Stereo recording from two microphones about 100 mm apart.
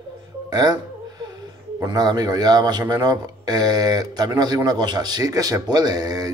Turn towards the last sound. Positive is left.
turn(degrees=-40)  # may be behind; listen again after turning